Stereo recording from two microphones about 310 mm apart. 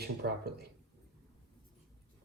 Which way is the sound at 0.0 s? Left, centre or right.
Right.